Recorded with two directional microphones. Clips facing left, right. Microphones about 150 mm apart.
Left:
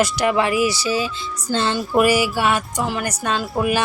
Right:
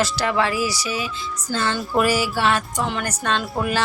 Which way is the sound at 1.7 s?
15° left (ahead or behind).